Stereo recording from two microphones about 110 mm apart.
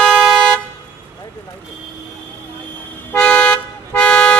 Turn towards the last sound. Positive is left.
turn(degrees=10)  # may be behind; listen again after turning